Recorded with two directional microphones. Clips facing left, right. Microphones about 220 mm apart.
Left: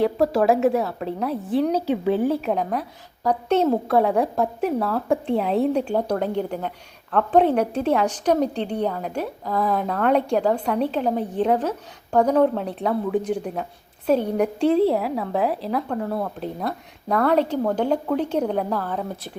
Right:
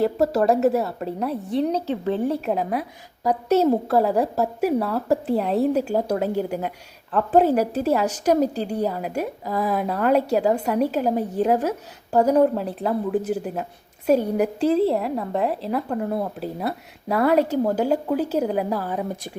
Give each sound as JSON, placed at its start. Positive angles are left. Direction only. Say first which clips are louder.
{"t": 0.0, "sound": "a woman's voice", "louder": "left 1 dB", "side_deg": 0}
{"t": 16.0, "sound": "a woman's voice", "louder": "right 1 dB", "side_deg": -15}
{"t": 16.4, "sound": "a woman's voice", "louder": "right 1 dB", "side_deg": -5}